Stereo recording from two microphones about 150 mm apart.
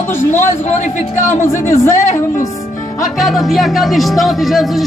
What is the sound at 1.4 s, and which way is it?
Speech, 20° left (ahead or behind).